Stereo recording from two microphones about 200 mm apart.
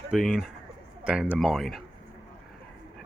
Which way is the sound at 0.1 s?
Centre (ahead or behind).